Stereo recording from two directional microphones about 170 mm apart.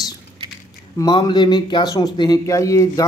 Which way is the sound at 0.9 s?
25° left (ahead or behind).